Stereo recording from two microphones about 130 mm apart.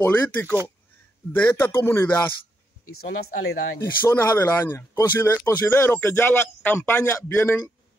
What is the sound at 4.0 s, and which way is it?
A man's voice, 15° left (ahead or behind).